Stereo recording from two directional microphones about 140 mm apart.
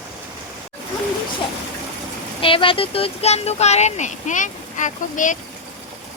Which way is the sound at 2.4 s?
40° left (ahead or behind).